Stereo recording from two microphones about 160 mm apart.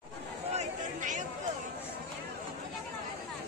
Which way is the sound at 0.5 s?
55° right (ahead or behind).